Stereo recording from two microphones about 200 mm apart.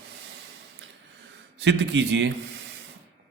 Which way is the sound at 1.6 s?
65° right (ahead or behind).